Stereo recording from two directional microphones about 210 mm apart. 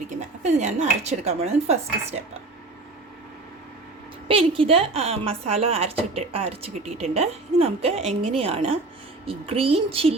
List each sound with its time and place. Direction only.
0.1 s speech: 35° right (ahead or behind)
4.3 s a woman's voice: 25° right (ahead or behind)